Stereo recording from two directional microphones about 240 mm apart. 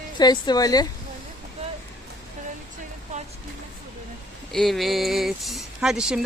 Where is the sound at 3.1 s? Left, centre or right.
Right.